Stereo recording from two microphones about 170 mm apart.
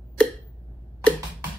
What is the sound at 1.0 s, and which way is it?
Tick, 5° left (ahead or behind).